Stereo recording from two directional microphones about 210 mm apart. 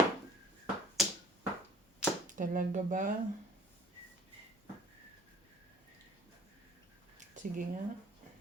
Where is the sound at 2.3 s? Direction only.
40° right (ahead or behind).